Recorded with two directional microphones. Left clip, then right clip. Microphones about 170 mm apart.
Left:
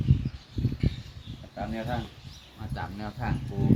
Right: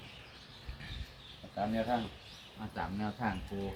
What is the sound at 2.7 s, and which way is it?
Speech, 75° left (ahead or behind).